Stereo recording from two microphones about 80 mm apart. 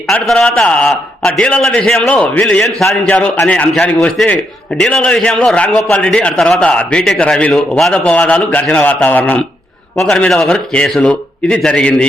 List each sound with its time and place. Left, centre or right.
0.1 s a man's voice: centre
2.0 s a man's voice: centre
2.7 s a man's voice: centre
3.1 s a man's voice: centre
8.3 s a man's voice: centre
10.0 s a man's voice: centre